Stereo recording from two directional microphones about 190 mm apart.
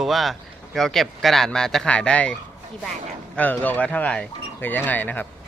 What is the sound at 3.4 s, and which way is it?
Speech, 10° left (ahead or behind).